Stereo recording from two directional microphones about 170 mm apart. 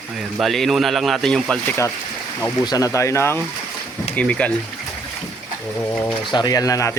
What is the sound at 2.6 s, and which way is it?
Speech, 20° left (ahead or behind).